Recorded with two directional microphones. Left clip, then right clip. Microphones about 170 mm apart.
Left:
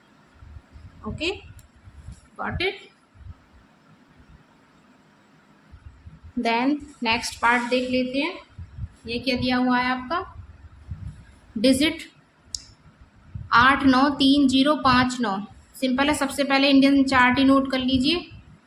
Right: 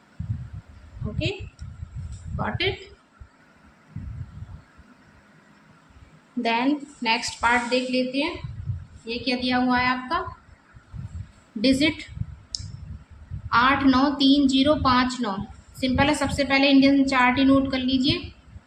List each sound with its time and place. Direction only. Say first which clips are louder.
2.3 s a woman's voice: even; 10° left (ahead or behind)
6.4 s a woman's voice: even; 10° left (ahead or behind)
11.6 s a woman's voice: left 1 dB; 25° left (ahead or behind)
12.5 s clicking: right 1 dB; 20° left (ahead or behind)
13.5 s a woman's voice: left 2 dB; 25° left (ahead or behind)